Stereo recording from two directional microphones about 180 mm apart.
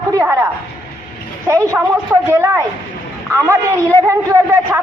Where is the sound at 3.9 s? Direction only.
15° right (ahead or behind).